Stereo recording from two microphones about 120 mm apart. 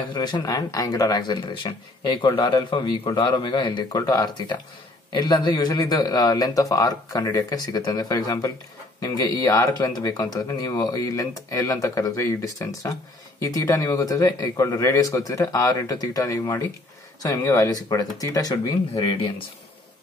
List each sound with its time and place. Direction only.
0.1 s speech: 35° left (ahead or behind)